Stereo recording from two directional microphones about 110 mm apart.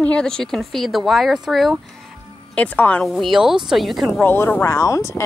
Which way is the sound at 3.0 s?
Centre (ahead or behind).